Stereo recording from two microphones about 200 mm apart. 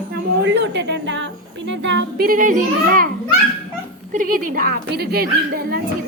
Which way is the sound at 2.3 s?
40° right (ahead or behind).